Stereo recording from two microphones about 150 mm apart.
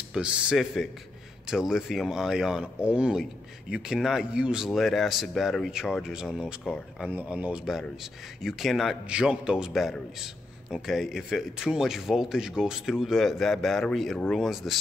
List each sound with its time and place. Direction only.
0.1 s a man's voice: 5° right (ahead or behind)